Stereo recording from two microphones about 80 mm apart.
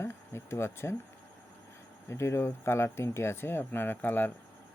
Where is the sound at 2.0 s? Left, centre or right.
Left.